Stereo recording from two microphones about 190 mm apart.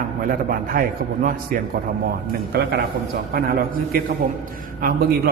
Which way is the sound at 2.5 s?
55° right (ahead or behind).